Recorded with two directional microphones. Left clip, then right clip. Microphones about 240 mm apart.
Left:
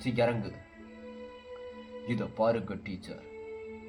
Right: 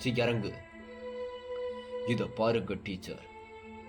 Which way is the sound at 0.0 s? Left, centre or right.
Right.